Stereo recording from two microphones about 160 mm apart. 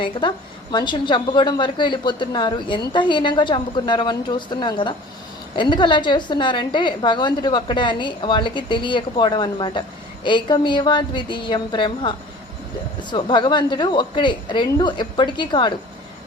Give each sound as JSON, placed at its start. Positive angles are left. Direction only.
{"t": 0.0, "sound": "a woman's voice", "side_deg": 30}